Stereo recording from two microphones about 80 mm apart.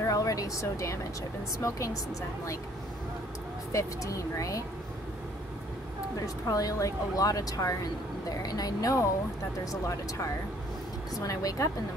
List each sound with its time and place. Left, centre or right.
0.0 s speech: left
3.7 s speech: left
6.1 s speech: left
11.1 s speech: left